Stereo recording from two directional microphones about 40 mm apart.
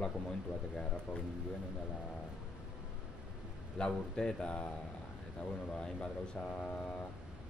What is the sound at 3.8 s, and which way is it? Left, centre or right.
Speech, left.